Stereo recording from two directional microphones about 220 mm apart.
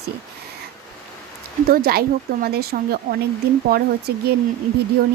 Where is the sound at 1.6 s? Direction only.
45° right (ahead or behind).